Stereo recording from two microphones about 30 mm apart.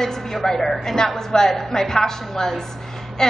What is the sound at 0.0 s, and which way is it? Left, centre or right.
A woman's voice, centre.